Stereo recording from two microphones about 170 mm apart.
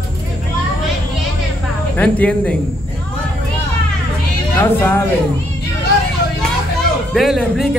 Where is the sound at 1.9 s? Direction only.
10° left (ahead or behind).